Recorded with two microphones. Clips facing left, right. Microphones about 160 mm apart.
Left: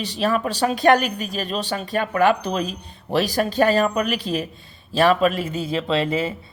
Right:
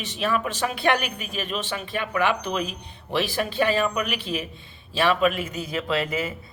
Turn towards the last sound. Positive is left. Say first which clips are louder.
# left 4 dB
turn(degrees=30)  # may be behind; listen again after turning